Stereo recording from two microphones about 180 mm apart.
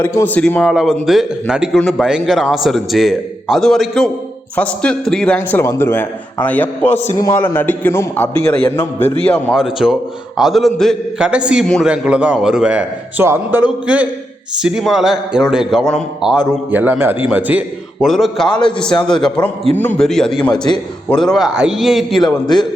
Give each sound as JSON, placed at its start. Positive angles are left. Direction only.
{"t": 0.0, "sound": "a man's voice", "side_deg": 15}
{"t": 6.8, "sound": "a man's voice", "side_deg": 40}
{"t": 7.2, "sound": "a man's voice", "side_deg": 15}